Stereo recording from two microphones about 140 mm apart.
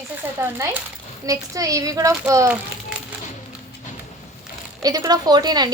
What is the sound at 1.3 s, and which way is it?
Speech, 25° right (ahead or behind).